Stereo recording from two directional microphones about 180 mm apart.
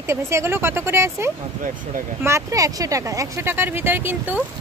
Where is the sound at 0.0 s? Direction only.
15° right (ahead or behind).